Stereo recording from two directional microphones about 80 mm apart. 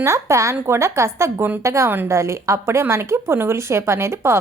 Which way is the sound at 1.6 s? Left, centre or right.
Right.